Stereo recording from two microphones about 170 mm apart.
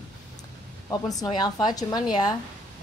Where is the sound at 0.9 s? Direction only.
20° left (ahead or behind).